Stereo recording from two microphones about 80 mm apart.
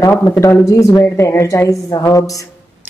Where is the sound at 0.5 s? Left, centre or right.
Left.